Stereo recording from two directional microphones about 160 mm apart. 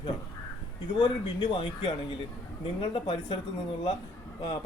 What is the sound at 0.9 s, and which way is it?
Speech, 30° left (ahead or behind).